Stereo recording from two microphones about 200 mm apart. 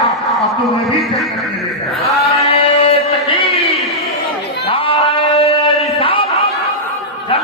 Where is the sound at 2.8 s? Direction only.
25° left (ahead or behind).